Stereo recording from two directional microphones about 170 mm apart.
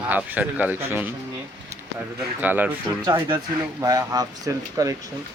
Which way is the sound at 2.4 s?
10° right (ahead or behind).